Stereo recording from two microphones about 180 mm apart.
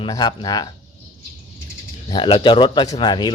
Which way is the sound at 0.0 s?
25° left (ahead or behind).